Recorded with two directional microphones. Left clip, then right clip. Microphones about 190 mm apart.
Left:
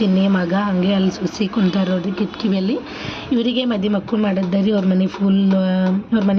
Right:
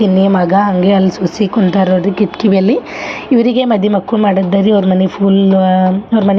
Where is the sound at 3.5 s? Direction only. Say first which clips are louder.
Right 8 dB; 10° right (ahead or behind).